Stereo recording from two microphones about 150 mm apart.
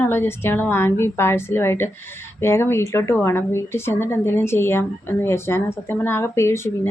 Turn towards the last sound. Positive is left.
turn(degrees=15)  # may be behind; listen again after turning